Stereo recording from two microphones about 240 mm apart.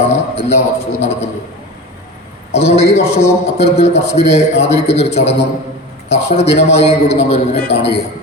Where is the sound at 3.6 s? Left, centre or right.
Left.